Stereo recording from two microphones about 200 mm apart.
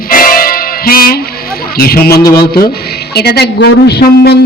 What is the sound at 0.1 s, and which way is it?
Music, 45° left (ahead or behind).